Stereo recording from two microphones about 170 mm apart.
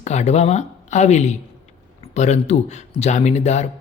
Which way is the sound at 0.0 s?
40° left (ahead or behind).